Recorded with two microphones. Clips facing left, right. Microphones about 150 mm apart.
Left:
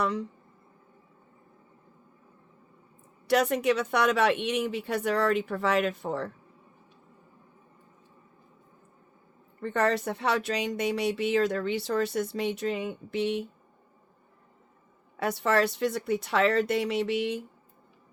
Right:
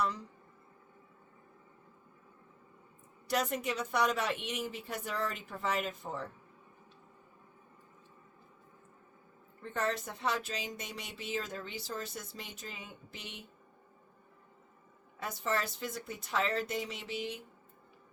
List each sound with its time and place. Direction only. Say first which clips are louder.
0.0 s speech: left 6 dB; 75° left (ahead or behind)
3.2 s speech: left 9 dB; 75° left (ahead or behind)
9.6 s speech: left 9 dB; 70° left (ahead or behind)
15.2 s speech: left 10 dB; 70° left (ahead or behind)